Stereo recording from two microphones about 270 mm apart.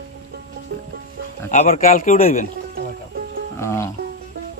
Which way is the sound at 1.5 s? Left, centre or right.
Left.